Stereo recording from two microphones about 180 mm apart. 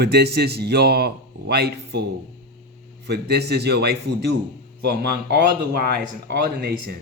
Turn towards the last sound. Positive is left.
turn(degrees=-60)  # may be behind; listen again after turning